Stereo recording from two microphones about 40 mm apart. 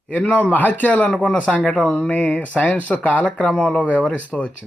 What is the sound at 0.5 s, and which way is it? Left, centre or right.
Speech, left.